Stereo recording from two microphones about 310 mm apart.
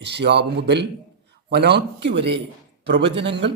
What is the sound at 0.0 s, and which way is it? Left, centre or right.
A man's voice, right.